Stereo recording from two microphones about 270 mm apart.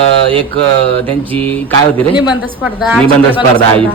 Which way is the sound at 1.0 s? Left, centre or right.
Centre.